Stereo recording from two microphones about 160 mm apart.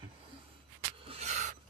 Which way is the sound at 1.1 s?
45° right (ahead or behind).